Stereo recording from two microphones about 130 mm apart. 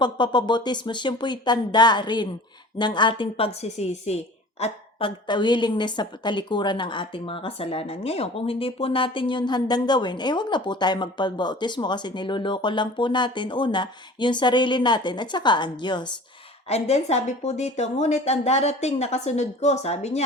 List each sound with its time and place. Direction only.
0.0 s a woman's voice: 35° left (ahead or behind); by 4.2 s 55° left (ahead or behind)
4.6 s a woman's voice: 40° left (ahead or behind)
16.6 s speech: 55° left (ahead or behind)